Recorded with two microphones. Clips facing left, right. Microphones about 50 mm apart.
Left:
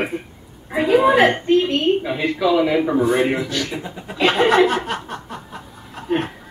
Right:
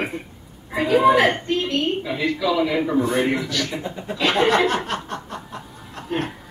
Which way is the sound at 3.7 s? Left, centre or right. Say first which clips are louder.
Right 1 dB; centre.